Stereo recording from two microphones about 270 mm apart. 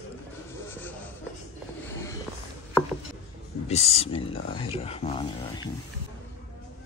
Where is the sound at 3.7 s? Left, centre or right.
Left.